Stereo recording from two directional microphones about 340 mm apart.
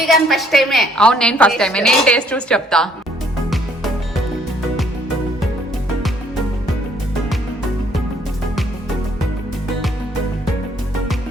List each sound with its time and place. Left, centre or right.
0.0 s a woman's voice: centre